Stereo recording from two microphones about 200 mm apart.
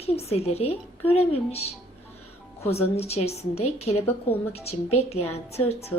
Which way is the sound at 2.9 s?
30° left (ahead or behind).